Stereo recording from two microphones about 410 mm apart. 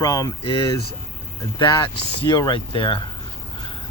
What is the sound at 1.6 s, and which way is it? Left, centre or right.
Speech, centre.